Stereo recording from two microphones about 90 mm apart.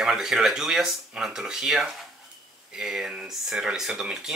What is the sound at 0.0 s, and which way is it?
Speech, 5° right (ahead or behind).